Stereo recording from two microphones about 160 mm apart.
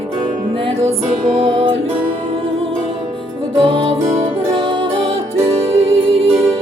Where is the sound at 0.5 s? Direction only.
35° right (ahead or behind).